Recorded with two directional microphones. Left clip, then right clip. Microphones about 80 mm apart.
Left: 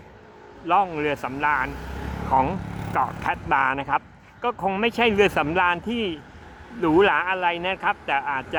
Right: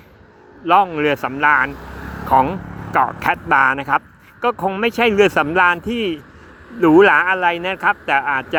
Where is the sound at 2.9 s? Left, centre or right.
Right.